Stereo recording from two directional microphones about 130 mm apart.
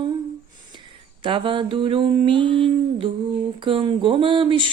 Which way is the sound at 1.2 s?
40° right (ahead or behind).